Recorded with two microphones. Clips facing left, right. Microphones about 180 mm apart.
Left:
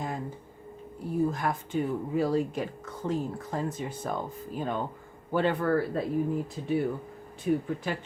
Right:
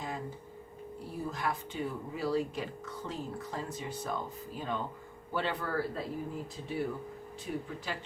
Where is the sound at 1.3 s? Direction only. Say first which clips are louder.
Left 5 dB; 50° left (ahead or behind).